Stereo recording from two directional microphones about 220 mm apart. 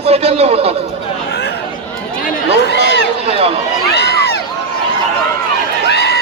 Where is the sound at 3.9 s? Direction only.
45° left (ahead or behind).